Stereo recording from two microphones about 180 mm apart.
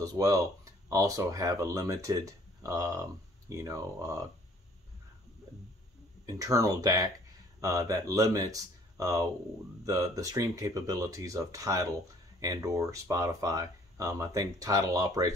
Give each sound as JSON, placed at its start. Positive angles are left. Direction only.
{"t": 0.0, "sound": "speech", "side_deg": -20}
{"t": 6.2, "sound": "speech", "side_deg": -20}